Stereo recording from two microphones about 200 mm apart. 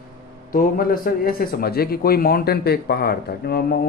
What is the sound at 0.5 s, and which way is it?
A man's voice, 45° left (ahead or behind).